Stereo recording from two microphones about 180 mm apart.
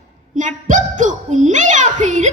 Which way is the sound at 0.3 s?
45° right (ahead or behind).